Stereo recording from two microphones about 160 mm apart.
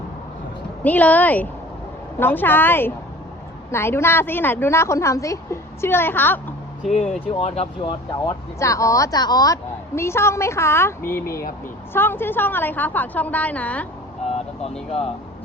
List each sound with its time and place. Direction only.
0.9 s speech: 10° left (ahead or behind)
7.3 s speech: 40° left (ahead or behind)
8.2 s speech: 20° left (ahead or behind)
14.3 s vehicle: 40° left (ahead or behind)